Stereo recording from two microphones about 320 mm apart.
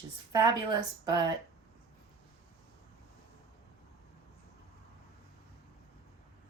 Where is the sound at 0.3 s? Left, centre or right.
Centre.